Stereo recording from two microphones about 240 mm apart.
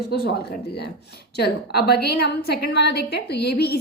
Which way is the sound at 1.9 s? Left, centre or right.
Left.